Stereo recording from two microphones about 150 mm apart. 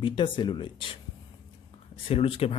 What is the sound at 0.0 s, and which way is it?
Speech, 35° left (ahead or behind).